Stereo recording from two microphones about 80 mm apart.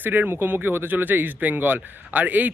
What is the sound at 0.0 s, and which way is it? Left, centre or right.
Speech, right.